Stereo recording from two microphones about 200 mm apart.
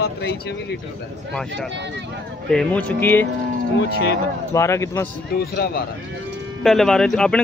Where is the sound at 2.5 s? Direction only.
5° left (ahead or behind).